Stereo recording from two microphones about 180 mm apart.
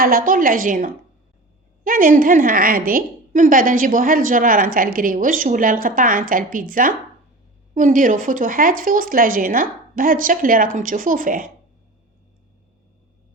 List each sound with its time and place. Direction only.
0.0 s a woman's voice: 50° right (ahead or behind)